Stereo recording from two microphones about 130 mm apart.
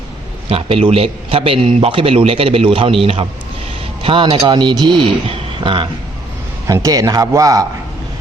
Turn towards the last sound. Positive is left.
turn(degrees=-25)  # may be behind; listen again after turning